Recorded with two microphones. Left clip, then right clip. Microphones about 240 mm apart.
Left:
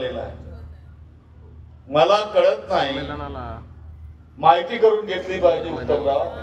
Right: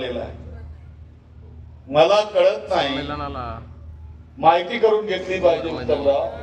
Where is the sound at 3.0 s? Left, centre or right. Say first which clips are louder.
Right 3 dB; right.